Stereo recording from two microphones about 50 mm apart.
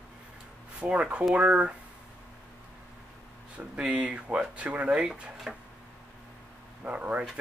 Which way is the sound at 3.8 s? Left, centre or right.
Right.